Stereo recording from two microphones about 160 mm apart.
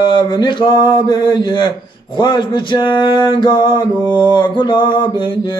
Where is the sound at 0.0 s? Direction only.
30° left (ahead or behind).